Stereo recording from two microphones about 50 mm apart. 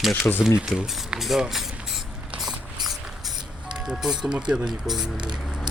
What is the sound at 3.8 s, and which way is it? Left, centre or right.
Speech, centre.